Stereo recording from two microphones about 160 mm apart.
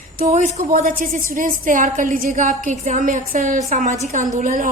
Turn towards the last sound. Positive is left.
turn(degrees=-55)  # may be behind; listen again after turning